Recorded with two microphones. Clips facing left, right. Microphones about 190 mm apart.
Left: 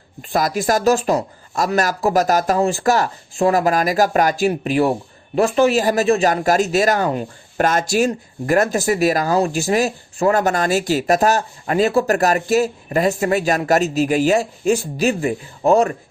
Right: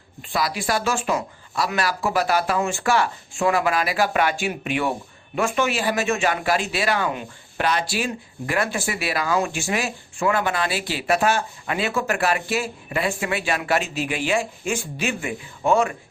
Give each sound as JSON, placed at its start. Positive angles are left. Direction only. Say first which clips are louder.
{"t": 0.2, "sound": "speech", "louder": "left 6 dB", "side_deg": 45}